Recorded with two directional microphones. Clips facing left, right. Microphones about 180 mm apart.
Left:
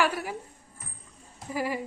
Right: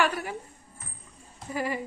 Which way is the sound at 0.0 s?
5° left (ahead or behind).